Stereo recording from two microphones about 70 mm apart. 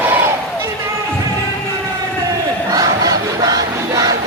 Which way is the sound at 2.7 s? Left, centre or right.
Right.